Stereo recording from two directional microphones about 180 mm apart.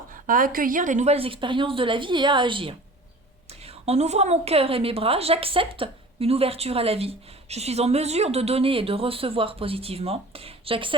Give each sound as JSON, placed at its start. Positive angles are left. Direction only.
{"t": 0.1, "sound": "a woman's voice", "side_deg": -50}
{"t": 3.8, "sound": "speech", "side_deg": -40}